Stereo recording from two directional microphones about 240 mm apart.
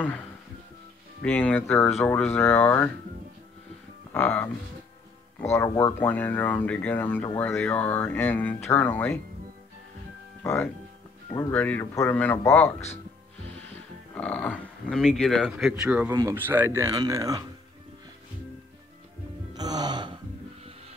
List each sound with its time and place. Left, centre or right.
1.2 s speech: centre
4.1 s speech: centre
10.4 s speech: centre
14.1 s speech: centre
19.5 s music: centre